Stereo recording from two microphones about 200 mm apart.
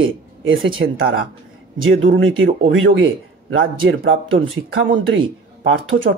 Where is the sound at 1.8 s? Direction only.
75° right (ahead or behind).